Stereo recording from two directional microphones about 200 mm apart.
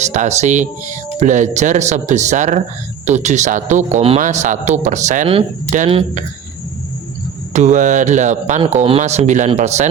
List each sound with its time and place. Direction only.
0.0 s speech: 35° right (ahead or behind)
7.5 s speech: 35° right (ahead or behind)